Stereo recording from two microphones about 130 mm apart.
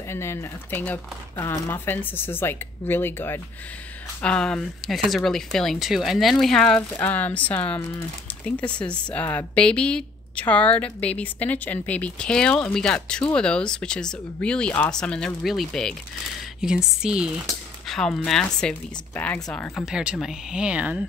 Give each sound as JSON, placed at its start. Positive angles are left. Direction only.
{"t": 0.1, "sound": "a woman's voice", "side_deg": 20}
{"t": 19.8, "sound": "speech", "side_deg": -5}